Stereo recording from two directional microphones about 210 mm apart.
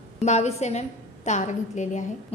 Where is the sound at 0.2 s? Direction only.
30° left (ahead or behind).